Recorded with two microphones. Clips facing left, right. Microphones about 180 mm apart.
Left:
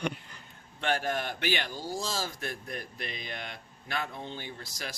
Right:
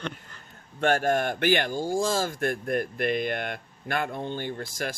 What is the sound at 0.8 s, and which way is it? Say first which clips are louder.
Speech: right 7 dB; 45° right (ahead or behind).